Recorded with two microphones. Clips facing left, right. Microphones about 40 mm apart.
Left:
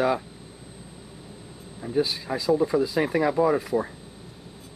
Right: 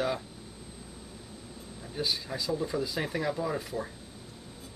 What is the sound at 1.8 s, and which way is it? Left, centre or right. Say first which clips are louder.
Speech: left 8 dB; left.